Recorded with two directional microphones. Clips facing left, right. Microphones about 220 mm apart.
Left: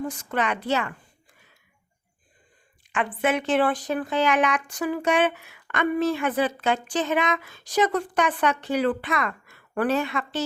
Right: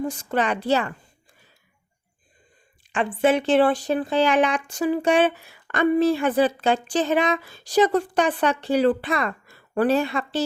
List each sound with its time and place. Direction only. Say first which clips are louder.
0.0 s speech: right 3 dB; 30° right (ahead or behind)
2.8 s speech: right 5 dB; 30° right (ahead or behind)